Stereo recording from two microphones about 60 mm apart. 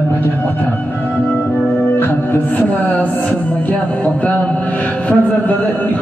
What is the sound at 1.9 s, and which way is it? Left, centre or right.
Music, left.